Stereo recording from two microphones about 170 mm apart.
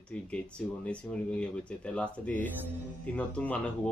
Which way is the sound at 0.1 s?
10° left (ahead or behind).